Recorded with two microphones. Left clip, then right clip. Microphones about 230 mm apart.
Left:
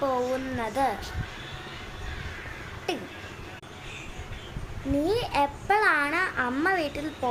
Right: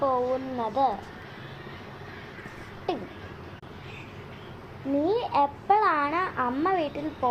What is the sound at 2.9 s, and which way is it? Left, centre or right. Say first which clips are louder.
Speech: right 1 dB; centre.